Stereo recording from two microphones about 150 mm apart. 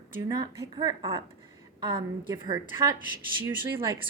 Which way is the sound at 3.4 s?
15° right (ahead or behind).